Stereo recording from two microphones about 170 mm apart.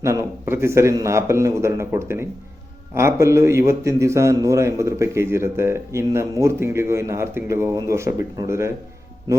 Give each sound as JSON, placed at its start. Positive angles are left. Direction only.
{"t": 0.0, "sound": "a man's voice", "side_deg": -15}